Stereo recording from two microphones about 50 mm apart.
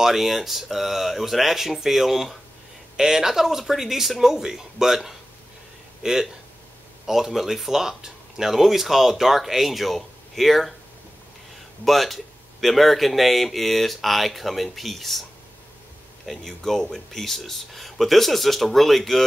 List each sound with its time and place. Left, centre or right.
0.0 s speech: centre
11.8 s speech: centre
16.3 s speech: centre